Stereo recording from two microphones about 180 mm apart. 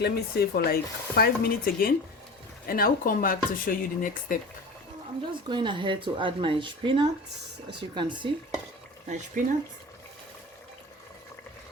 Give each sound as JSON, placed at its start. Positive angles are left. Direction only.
{"t": 0.0, "sound": "stir", "side_deg": 60}
{"t": 2.6, "sound": "speech", "side_deg": 55}
{"t": 5.3, "sound": "speech", "side_deg": -25}
{"t": 9.0, "sound": "speech", "side_deg": -40}